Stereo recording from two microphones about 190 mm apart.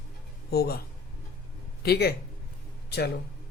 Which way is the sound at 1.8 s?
55° left (ahead or behind).